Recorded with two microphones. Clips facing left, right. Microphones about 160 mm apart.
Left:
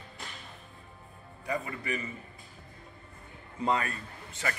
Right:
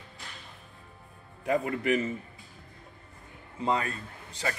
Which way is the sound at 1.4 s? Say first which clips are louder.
Right 7 dB; 80° right.